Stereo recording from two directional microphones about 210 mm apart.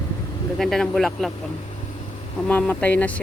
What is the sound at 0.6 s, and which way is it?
Speech, centre (ahead or behind).